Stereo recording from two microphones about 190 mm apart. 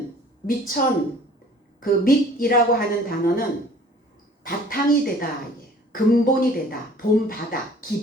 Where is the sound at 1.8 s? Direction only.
50° left (ahead or behind).